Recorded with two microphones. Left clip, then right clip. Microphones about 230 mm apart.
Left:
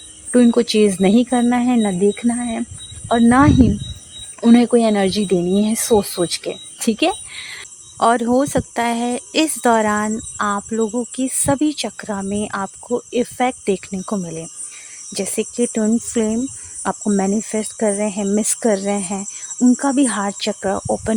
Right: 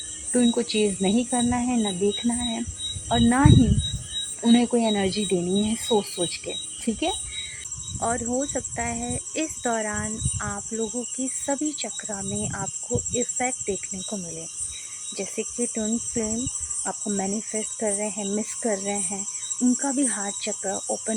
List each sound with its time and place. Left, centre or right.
0.3 s speech: left